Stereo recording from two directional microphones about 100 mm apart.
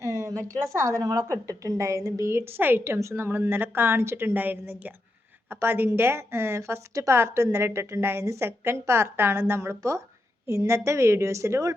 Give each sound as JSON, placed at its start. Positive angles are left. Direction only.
{"t": 0.0, "sound": "a woman's voice", "side_deg": -35}